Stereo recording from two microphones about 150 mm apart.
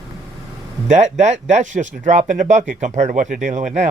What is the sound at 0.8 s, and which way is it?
Speech, 50° right (ahead or behind).